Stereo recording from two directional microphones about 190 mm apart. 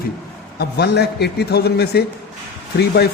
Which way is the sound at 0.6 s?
60° left (ahead or behind).